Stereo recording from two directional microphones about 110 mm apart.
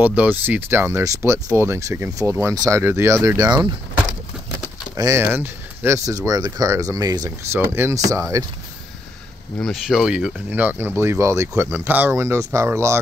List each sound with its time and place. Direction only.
0.0 s speech: 15° right (ahead or behind)
2.5 s speech: 35° right (ahead or behind)
2.8 s speech: 20° right (ahead or behind); by 3.7 s 40° right (ahead or behind)
4.9 s speech: 30° right (ahead or behind)
5.2 s speech: 15° right (ahead or behind)
6.0 s speech: 30° right (ahead or behind)
7.2 s speech: 20° right (ahead or behind)
9.6 s speech: centre (ahead or behind); by 13.0 s 25° right (ahead or behind)